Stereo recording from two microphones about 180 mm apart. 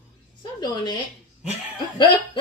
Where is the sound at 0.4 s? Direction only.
25° left (ahead or behind).